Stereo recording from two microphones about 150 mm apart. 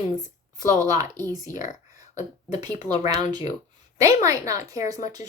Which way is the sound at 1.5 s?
55° left (ahead or behind).